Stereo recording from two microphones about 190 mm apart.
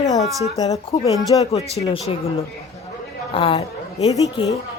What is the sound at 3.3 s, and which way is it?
Speech, 30° left (ahead or behind).